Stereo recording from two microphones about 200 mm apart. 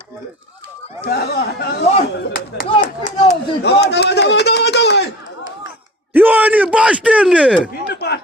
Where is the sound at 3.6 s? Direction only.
55° left (ahead or behind).